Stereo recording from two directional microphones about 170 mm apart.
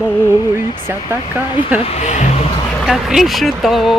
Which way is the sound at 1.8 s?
40° left (ahead or behind).